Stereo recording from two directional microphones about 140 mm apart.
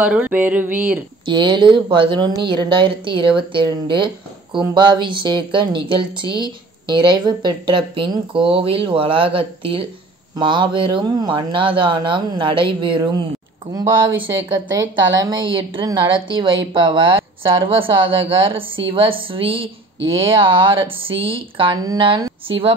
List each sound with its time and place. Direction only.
0.0 s a sound: 10° right (ahead or behind)
1.2 s speech: 35° right (ahead or behind)
14.5 s speech: 30° right (ahead or behind)